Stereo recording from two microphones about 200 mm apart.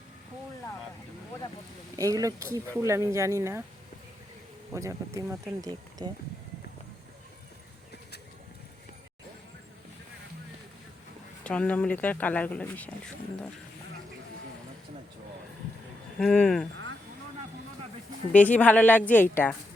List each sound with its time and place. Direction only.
2.0 s speech: 15° right (ahead or behind)
4.7 s speech: 15° right (ahead or behind)
11.4 s speech: 5° left (ahead or behind)
16.2 s speech: 5° left (ahead or behind)
18.3 s speech: 5° left (ahead or behind)